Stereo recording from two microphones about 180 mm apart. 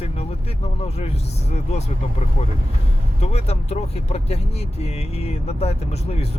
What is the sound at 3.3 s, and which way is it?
Speech, 35° left (ahead or behind).